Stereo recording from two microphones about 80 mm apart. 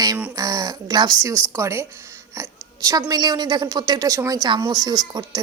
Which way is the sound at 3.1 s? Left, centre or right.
Right.